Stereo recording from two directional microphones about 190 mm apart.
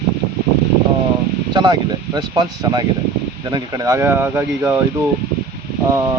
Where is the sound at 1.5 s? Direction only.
25° right (ahead or behind).